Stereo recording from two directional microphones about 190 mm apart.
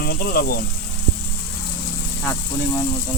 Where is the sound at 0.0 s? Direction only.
55° left (ahead or behind).